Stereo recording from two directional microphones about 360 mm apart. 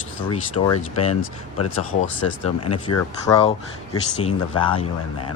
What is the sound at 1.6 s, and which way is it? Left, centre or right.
Speech, left.